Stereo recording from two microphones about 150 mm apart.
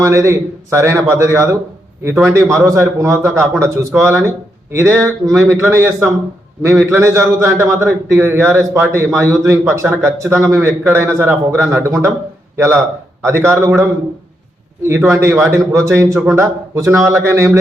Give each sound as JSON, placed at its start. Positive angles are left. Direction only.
{"t": 0.0, "sound": "a man's voice", "side_deg": -20}
{"t": 14.8, "sound": "a man's voice", "side_deg": -20}